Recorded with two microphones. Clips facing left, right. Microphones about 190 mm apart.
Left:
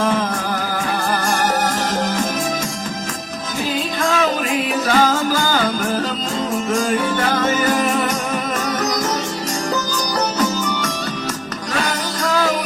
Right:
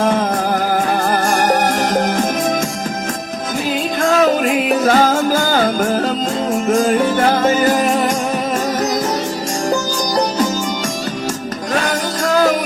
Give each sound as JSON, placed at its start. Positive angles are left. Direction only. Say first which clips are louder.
{"t": 0.0, "sound": "music", "louder": "right 4 dB", "side_deg": -50}
{"t": 4.0, "sound": "music", "louder": "right 6 dB", "side_deg": -40}
{"t": 7.6, "sound": "music", "louder": "right 3 dB", "side_deg": -40}
{"t": 11.7, "sound": "music", "louder": "right 4 dB", "side_deg": -50}